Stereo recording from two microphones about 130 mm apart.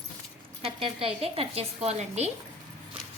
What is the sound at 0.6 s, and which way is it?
A woman's voice, 45° right (ahead or behind).